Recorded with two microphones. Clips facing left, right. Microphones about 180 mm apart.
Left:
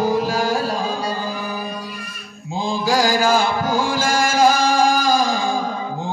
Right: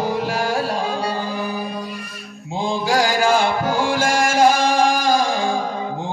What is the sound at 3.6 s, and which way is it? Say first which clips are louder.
Music: right 1 dB; 65° right (ahead or behind).